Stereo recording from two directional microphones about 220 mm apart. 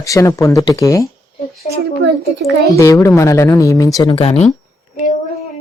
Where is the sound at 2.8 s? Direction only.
15° left (ahead or behind).